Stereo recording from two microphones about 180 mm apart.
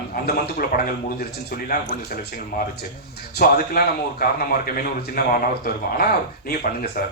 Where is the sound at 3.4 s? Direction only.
55° left (ahead or behind).